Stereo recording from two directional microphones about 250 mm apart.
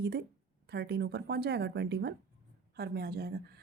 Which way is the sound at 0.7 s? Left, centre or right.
Right.